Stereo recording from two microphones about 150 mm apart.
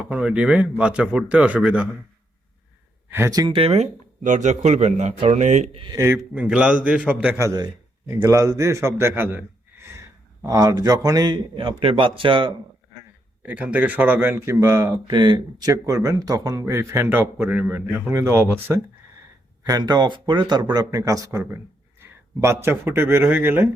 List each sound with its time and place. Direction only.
0.0 s speech: 10° right (ahead or behind)
3.1 s speech: 20° right (ahead or behind)
3.5 s speech: 40° right (ahead or behind)
5.7 s a man's voice: 35° right (ahead or behind)
6.0 s speech: 10° right (ahead or behind)
7.4 s a man's voice: 25° right (ahead or behind)
13.4 s speech: 10° right (ahead or behind)
19.6 s a man's voice: 25° right (ahead or behind)